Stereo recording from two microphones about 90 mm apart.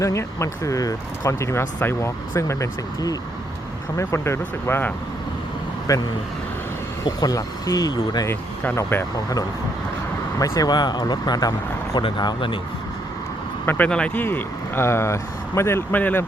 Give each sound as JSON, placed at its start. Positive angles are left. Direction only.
{"t": 0.0, "sound": "speech", "side_deg": 35}
{"t": 3.9, "sound": "speech", "side_deg": 30}
{"t": 5.9, "sound": "speech", "side_deg": 35}
{"t": 8.3, "sound": "speech", "side_deg": 30}
{"t": 10.3, "sound": "speech", "side_deg": 40}
{"t": 10.7, "sound": "speech", "side_deg": 50}
{"t": 11.9, "sound": "speech", "side_deg": 60}
{"t": 13.7, "sound": "speech", "side_deg": 15}
{"t": 14.3, "sound": "speech", "side_deg": 25}
{"t": 16.0, "sound": "speech", "side_deg": 20}